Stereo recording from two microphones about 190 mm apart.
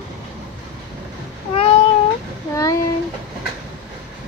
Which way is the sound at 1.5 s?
30° left (ahead or behind).